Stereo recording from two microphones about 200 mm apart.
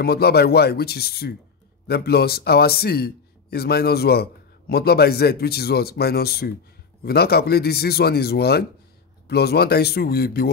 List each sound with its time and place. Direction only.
0.0 s a man's voice: 50° left (ahead or behind)